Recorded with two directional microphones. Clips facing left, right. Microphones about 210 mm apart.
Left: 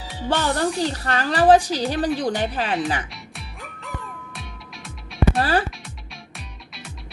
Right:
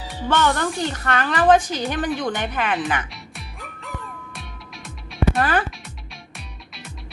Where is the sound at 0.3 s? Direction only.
30° left (ahead or behind).